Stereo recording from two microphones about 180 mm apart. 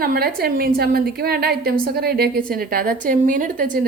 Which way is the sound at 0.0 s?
60° right (ahead or behind).